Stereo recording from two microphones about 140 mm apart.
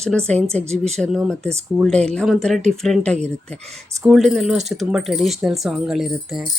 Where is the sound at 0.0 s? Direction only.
5° left (ahead or behind).